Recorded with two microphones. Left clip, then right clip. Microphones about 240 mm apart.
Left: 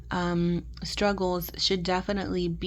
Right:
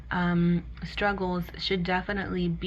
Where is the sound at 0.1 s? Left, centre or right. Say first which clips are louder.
Even; left.